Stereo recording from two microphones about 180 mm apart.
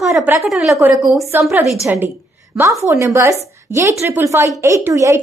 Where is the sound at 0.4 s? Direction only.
Centre (ahead or behind).